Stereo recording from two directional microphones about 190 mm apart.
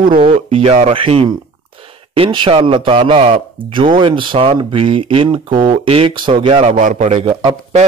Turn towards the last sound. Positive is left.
turn(degrees=-30)  # may be behind; listen again after turning